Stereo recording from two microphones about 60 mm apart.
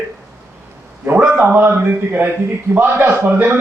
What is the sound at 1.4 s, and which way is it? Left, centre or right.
A man's voice, right.